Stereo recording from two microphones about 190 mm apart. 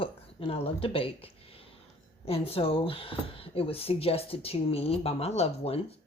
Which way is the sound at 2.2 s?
30° left (ahead or behind).